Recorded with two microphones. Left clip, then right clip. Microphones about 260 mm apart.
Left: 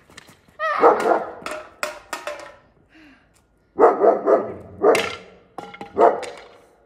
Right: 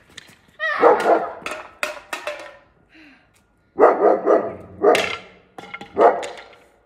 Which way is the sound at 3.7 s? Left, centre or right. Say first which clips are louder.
Right 1 dB; centre.